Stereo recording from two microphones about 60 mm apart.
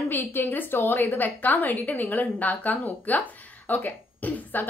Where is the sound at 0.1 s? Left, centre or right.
Left.